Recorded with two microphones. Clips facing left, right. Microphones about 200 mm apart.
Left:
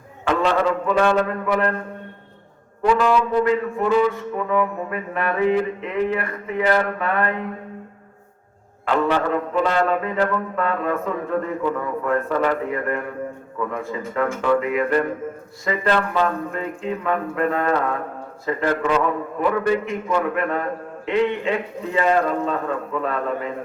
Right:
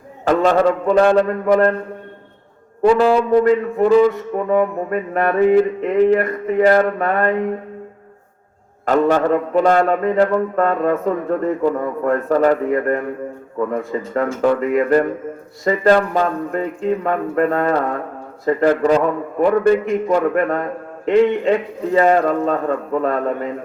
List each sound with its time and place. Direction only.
0.3 s music: 40° right (ahead or behind)
2.8 s music: 35° right (ahead or behind)
8.8 s music: 45° right (ahead or behind)
21.9 s a man's voice: 45° right (ahead or behind)